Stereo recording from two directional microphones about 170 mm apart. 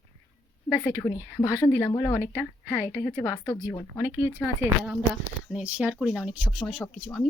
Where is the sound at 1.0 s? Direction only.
20° left (ahead or behind).